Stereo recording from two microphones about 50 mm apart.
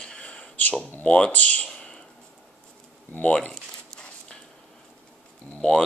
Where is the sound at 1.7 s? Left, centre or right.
Centre.